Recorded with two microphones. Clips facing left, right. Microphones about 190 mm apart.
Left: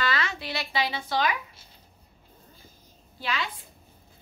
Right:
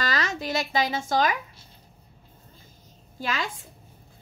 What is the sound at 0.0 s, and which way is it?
A woman's voice, 40° right (ahead or behind).